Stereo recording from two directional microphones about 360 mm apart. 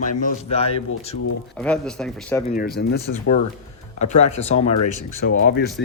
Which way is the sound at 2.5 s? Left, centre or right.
Left.